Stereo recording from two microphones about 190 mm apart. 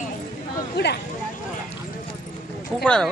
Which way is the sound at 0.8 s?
60° left (ahead or behind).